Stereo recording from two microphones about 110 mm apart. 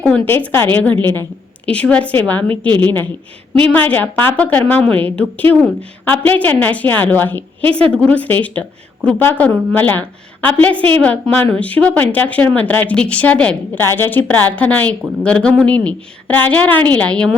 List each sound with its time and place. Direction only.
0.0 s a woman's voice: 15° left (ahead or behind)